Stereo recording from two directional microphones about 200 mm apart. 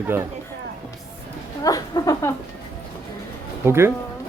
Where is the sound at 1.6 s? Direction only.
20° left (ahead or behind).